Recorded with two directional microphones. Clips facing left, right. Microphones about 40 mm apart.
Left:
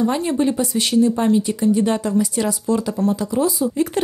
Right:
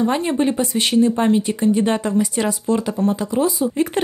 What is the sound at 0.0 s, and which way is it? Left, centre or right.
Speech, right.